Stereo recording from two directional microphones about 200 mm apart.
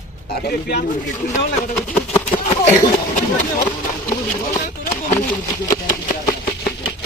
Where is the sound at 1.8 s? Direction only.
10° left (ahead or behind).